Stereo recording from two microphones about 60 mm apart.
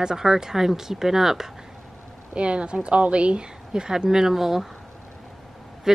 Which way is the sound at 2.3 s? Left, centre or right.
Centre.